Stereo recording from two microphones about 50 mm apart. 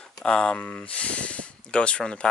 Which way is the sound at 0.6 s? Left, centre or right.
Left.